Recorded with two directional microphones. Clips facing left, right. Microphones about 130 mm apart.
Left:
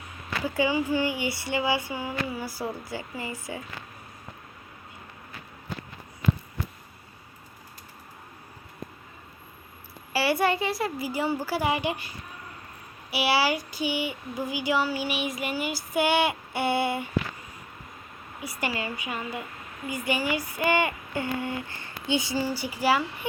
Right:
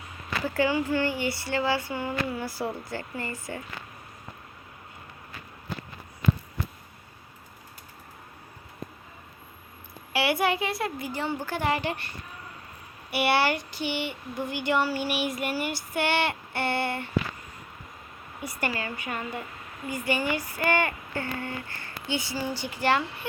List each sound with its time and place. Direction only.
0.4 s speech: 10° left (ahead or behind)
10.1 s a woman's voice: centre (ahead or behind)
18.6 s speech: 10° left (ahead or behind)